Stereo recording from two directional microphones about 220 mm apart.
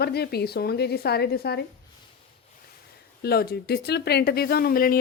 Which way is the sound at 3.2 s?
45° left (ahead or behind).